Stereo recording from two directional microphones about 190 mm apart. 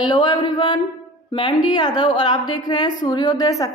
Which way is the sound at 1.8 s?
25° left (ahead or behind).